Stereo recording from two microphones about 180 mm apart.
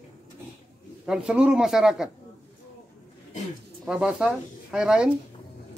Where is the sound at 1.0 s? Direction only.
5° right (ahead or behind).